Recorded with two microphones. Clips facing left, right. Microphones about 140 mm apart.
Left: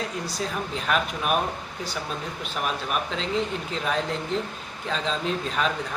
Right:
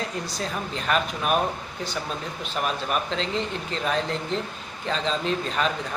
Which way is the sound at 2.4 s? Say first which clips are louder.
Right 2 dB; 5° left (ahead or behind).